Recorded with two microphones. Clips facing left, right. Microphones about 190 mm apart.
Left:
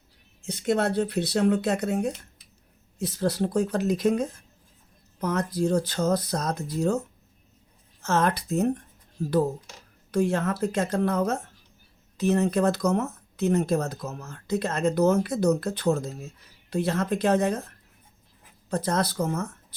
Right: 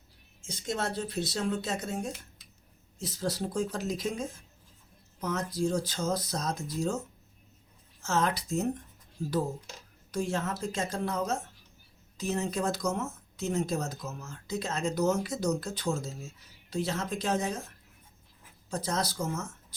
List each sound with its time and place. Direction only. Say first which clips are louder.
0.4 s speech: left 9 dB; 65° left (ahead or behind)
8.0 s speech: left 5 dB; 60° left (ahead or behind)
10.1 s speech: left 7 dB; 60° left (ahead or behind)
18.7 s speech: left 6 dB; 60° left (ahead or behind)